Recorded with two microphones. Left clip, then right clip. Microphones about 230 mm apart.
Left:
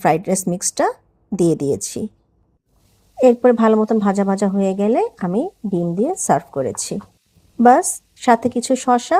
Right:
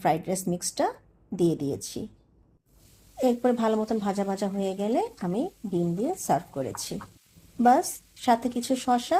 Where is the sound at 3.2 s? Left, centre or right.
Left.